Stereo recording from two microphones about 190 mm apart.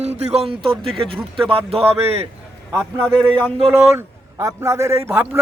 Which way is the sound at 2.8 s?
5° left (ahead or behind).